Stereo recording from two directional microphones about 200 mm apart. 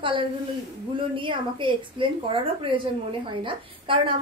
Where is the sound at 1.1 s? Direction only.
25° right (ahead or behind).